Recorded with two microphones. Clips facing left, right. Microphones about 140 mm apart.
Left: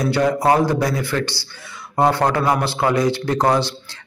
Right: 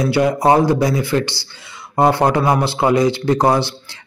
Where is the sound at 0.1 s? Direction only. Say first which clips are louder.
Right 2 dB; 15° right (ahead or behind).